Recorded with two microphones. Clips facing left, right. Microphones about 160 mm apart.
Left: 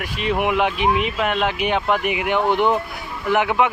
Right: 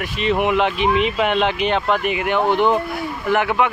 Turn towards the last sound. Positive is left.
turn(degrees=15)  # may be behind; listen again after turning